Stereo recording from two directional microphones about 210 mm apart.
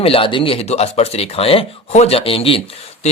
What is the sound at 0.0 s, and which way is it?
Speech, 25° left (ahead or behind).